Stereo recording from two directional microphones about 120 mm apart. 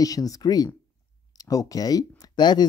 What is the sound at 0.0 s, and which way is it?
Speech, 30° left (ahead or behind).